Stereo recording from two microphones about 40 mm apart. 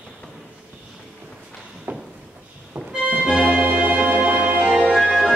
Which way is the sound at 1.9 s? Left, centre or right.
Right.